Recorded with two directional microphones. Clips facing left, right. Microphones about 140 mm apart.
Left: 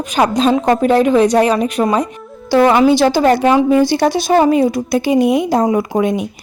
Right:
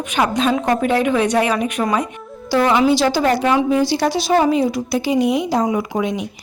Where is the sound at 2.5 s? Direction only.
55° left (ahead or behind).